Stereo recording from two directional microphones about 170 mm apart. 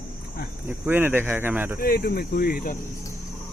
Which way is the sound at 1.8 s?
65° left (ahead or behind).